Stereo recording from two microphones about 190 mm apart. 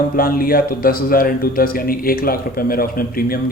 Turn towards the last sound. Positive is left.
turn(degrees=50)  # may be behind; listen again after turning